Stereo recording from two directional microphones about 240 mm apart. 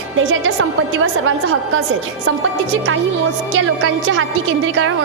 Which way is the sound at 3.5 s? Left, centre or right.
Right.